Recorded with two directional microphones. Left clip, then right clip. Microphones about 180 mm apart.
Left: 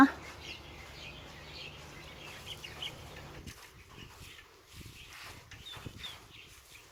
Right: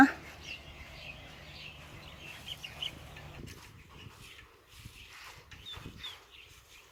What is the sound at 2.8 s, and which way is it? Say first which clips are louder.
Chicken: right 3 dB; 50° left (ahead or behind).